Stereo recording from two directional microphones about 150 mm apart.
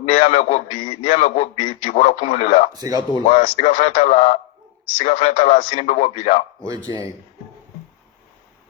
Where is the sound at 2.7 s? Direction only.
25° right (ahead or behind).